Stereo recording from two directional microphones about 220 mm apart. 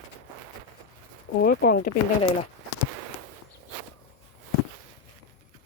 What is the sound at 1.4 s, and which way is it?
Speech, 45° left (ahead or behind).